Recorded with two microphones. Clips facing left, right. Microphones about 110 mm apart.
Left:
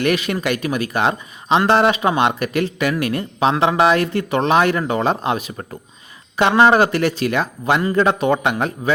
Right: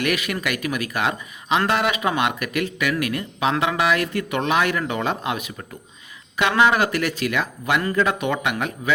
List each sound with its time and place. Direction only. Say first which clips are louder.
0.0 s speech: left 5 dB; 30° left (ahead or behind)